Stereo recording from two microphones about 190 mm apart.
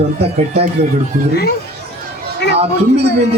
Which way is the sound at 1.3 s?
55° left (ahead or behind).